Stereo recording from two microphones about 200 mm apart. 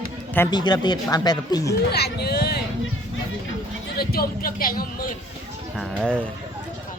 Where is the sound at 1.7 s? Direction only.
55° left (ahead or behind).